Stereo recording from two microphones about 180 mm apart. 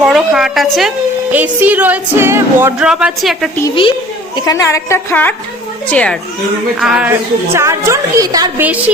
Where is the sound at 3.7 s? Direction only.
30° left (ahead or behind).